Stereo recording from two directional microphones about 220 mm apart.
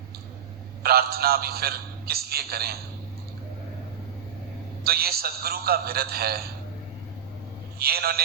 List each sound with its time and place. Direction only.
0.8 s a man's voice: 45° right (ahead or behind)
4.8 s a man's voice: 45° right (ahead or behind)
7.8 s a man's voice: 45° right (ahead or behind)